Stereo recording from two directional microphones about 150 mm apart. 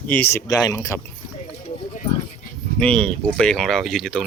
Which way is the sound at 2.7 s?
5° left (ahead or behind).